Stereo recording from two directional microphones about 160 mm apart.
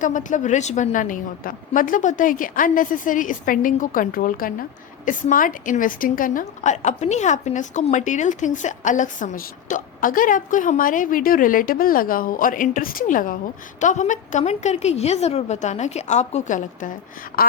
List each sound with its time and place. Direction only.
0.0 s a woman's voice: 55° left (ahead or behind)